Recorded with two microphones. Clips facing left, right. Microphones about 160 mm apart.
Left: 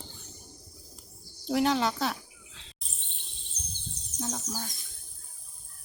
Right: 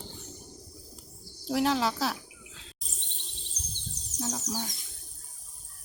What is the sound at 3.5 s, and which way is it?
Bird, 40° right (ahead or behind).